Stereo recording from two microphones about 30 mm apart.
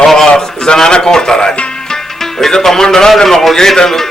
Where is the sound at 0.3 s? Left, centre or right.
Left.